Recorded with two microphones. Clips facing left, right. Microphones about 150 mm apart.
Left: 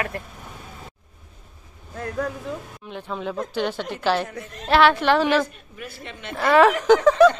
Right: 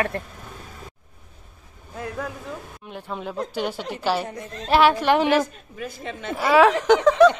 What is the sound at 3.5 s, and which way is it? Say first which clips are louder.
A woman's voice: left 2 dB; 10° right (ahead or behind).